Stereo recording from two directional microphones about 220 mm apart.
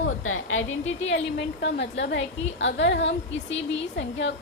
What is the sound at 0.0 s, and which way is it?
A woman's voice, 65° left (ahead or behind).